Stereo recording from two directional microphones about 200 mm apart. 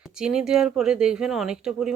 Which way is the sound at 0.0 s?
5° right (ahead or behind).